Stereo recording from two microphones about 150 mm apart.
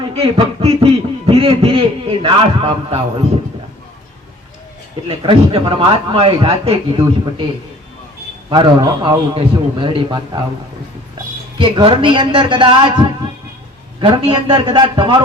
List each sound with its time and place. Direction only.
0.0 s a sound: 35° right (ahead or behind)
5.0 s speech: 35° right (ahead or behind)
8.4 s speech: 30° right (ahead or behind)
11.5 s speech: 35° right (ahead or behind)